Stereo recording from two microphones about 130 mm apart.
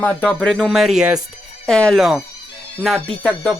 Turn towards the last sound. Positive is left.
turn(degrees=5)  # may be behind; listen again after turning